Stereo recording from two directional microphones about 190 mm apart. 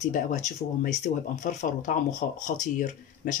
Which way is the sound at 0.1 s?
40° left (ahead or behind).